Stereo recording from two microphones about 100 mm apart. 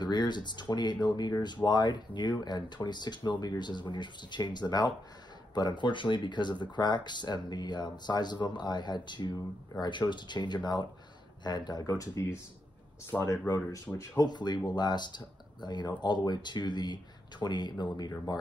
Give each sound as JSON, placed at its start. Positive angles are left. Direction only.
{"t": 0.0, "sound": "speech", "side_deg": 45}
{"t": 11.9, "sound": "speech", "side_deg": 30}
{"t": 13.1, "sound": "speech", "side_deg": 15}
{"t": 13.9, "sound": "speech", "side_deg": 35}
{"t": 14.3, "sound": "speech", "side_deg": 45}